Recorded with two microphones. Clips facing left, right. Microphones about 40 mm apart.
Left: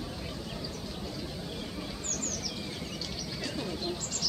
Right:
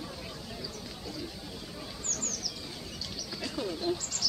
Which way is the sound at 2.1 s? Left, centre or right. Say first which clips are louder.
Left 2 dB; left.